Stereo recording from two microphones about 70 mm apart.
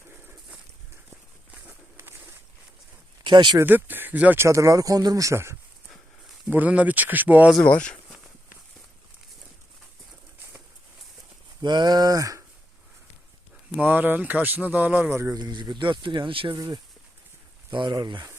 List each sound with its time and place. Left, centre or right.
2.0 s a sound: right
3.2 s speech: right
3.7 s speech: right
4.4 s speech: right
5.3 s speech: right
6.5 s speech: right
7.6 s speech: centre
11.6 s speech: right
13.7 s speech: right
15.1 s speech: right
15.4 s speech: right